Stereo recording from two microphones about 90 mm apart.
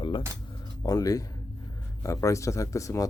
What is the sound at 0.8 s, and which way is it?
Speech, 40° left (ahead or behind).